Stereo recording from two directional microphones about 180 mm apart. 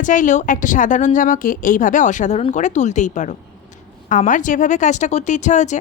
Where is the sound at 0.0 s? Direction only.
45° left (ahead or behind).